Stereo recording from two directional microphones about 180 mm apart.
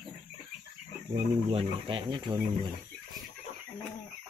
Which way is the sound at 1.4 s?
30° right (ahead or behind).